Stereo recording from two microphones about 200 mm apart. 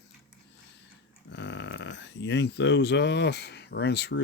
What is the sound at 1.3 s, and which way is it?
Speech, 65° left (ahead or behind).